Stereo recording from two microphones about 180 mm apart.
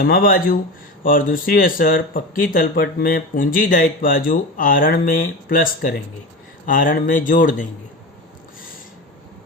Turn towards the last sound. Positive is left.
turn(degrees=45)  # may be behind; listen again after turning